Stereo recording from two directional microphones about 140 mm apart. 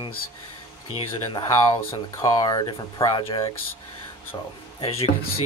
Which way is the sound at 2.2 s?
25° left (ahead or behind).